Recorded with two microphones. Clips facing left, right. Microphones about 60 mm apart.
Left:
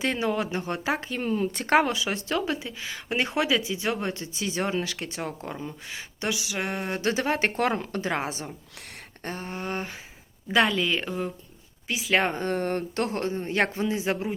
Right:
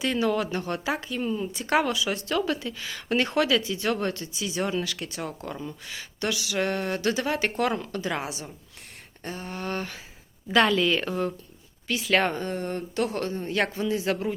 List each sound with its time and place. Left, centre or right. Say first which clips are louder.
0.0 s a woman's voice: right 1 dB; left
1.7 s a woman's voice: left 1 dB; left
9.5 s a woman's voice: right 2 dB; left
10.5 s speech: right 2 dB; centre
12.1 s a woman's voice: even; centre
12.4 s speech: left 3 dB; left
13.1 s a woman's voice: left 1 dB; left